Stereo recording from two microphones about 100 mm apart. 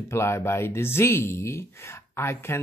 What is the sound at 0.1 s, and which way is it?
Speech, 25° left (ahead or behind).